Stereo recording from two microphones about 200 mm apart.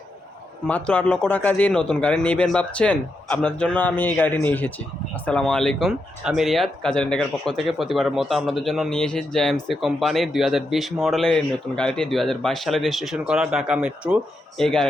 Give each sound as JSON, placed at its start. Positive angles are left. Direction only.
{"t": 0.7, "sound": "a man's voice", "side_deg": 5}